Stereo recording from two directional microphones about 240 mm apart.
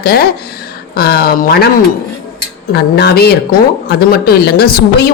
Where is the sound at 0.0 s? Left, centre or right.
Left.